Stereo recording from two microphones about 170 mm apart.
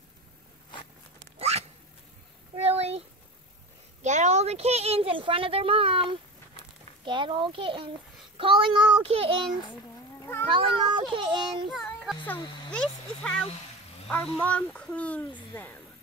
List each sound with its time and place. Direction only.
2.5 s a sound: 35° right (ahead or behind)
4.0 s speech: 45° right (ahead or behind)
8.4 s child singing: 30° right (ahead or behind)
10.5 s speech: 30° right (ahead or behind)
11.7 s speech: centre (ahead or behind)